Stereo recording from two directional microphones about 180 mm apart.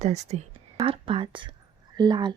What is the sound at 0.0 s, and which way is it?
A woman's voice, 40° right (ahead or behind).